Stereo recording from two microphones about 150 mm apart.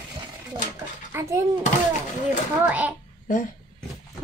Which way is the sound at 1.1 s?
20° right (ahead or behind).